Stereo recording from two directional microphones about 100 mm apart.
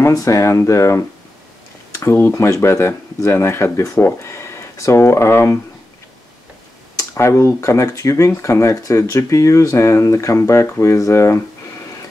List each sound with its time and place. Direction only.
0.0 s speech: 30° left (ahead or behind)
7.0 s speech: 30° left (ahead or behind)